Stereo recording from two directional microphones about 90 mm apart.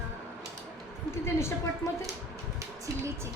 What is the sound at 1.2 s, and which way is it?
Speech, 30° left (ahead or behind).